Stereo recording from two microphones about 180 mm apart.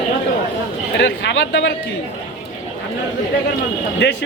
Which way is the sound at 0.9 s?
85° left.